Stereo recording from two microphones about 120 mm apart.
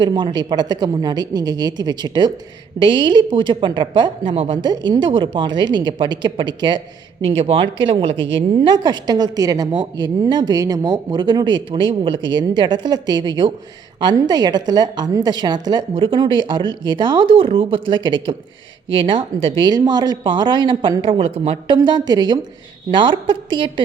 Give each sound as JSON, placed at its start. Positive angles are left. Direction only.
{"t": 0.0, "sound": "speech", "side_deg": -40}
{"t": 7.2, "sound": "a woman's voice", "side_deg": -50}